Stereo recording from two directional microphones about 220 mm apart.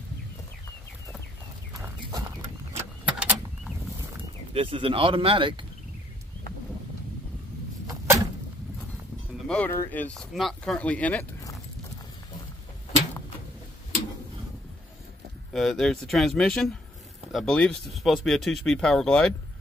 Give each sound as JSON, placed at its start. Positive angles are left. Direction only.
{"t": 2.0, "sound": "horse", "side_deg": -20}
{"t": 3.1, "sound": "vehicle", "side_deg": -5}
{"t": 4.6, "sound": "speech", "side_deg": -25}
{"t": 7.8, "sound": "a sound", "side_deg": -15}
{"t": 9.5, "sound": "speech", "side_deg": 10}
{"t": 15.5, "sound": "speech", "side_deg": 0}